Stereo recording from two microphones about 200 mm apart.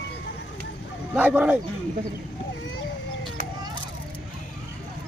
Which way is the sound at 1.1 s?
5° right (ahead or behind).